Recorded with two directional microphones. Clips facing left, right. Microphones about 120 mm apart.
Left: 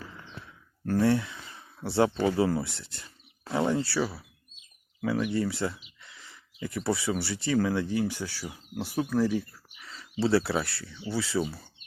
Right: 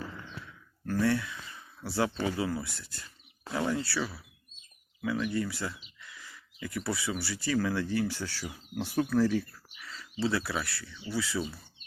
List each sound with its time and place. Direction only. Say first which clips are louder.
0.3 s a sound: right 1 dB; 25° left (ahead or behind)
2.1 s speech: left 6 dB; 35° left (ahead or behind)
5.3 s speech: left 4 dB; 25° left (ahead or behind)
9.8 s speech: left 3 dB; 25° left (ahead or behind)